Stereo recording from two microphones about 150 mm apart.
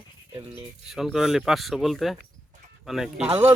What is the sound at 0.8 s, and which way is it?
Speech, 5° right (ahead or behind).